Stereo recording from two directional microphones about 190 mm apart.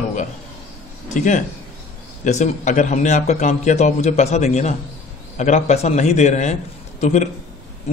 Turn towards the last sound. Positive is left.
turn(degrees=40)  # may be behind; listen again after turning